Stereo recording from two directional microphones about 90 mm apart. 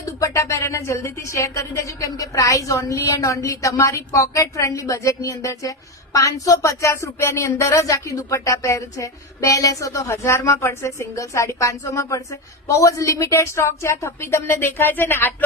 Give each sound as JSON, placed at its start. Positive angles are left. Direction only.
{"t": 0.0, "sound": "a woman's voice", "side_deg": 35}